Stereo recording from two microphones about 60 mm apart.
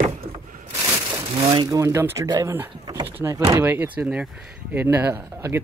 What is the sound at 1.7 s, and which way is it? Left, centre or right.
Speech, right.